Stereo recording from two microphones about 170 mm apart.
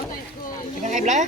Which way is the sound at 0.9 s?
45° right (ahead or behind).